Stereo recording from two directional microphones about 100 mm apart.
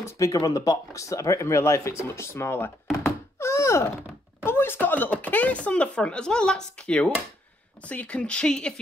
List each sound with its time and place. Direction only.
0.0 s speech: 35° left (ahead or behind)
3.3 s thunk: 30° left (ahead or behind)
4.5 s speech: 20° left (ahead or behind)